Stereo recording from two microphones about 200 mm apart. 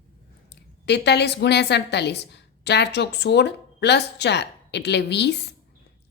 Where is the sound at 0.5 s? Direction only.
55° left (ahead or behind).